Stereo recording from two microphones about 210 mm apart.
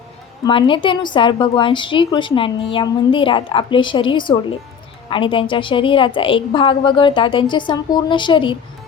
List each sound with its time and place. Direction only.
0.4 s a woman's voice: 25° left (ahead or behind)